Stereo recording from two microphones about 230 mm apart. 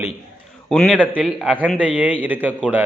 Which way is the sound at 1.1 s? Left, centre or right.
Centre.